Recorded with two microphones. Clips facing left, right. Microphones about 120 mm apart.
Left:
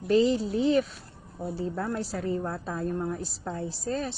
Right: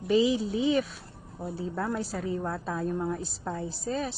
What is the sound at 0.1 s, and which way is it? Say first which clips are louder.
Speech: left 1 dB; centre (ahead or behind).